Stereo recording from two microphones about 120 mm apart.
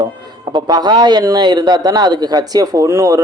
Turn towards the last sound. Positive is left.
turn(degrees=-25)  # may be behind; listen again after turning